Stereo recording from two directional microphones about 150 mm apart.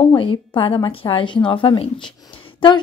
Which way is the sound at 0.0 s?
30° left (ahead or behind).